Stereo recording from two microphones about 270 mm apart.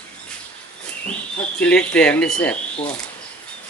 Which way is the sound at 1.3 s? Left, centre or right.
Centre.